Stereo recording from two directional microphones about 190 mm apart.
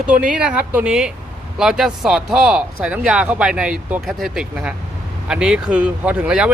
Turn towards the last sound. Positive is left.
turn(degrees=-5)  # may be behind; listen again after turning